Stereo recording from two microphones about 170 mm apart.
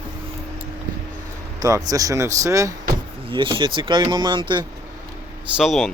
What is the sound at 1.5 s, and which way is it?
A man's voice, 20° right (ahead or behind).